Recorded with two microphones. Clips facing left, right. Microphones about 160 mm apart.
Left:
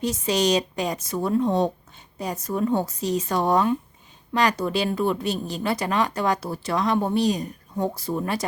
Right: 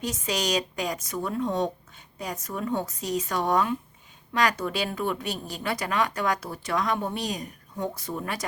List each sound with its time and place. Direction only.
0.0 s a woman's voice: 30° left (ahead or behind)